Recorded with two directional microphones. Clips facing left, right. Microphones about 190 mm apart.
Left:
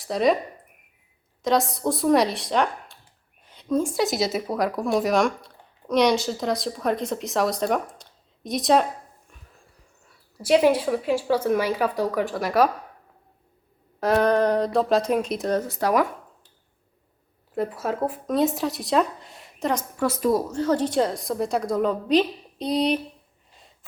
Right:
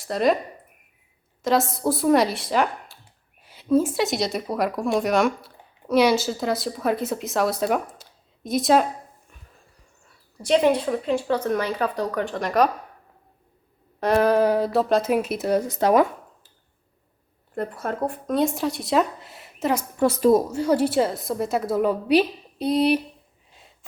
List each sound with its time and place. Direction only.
0.0 s speech: centre (ahead or behind)
1.4 s speech: centre (ahead or behind)
10.3 s speech: 5° left (ahead or behind)
14.0 s speech: centre (ahead or behind); by 16.0 s 25° right (ahead or behind)
17.5 s speech: 5° left (ahead or behind)
20.0 s speech: 25° right (ahead or behind)
20.4 s a woman's voice: 10° right (ahead or behind)